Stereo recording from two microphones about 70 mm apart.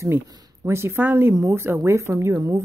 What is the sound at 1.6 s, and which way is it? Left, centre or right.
Speech, right.